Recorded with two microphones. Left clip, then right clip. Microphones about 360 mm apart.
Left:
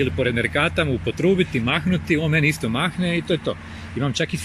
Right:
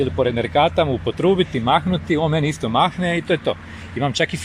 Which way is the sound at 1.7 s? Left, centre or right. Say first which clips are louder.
Right 3 dB; right.